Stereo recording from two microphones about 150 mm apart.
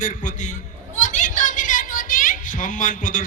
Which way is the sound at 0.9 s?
55° left (ahead or behind).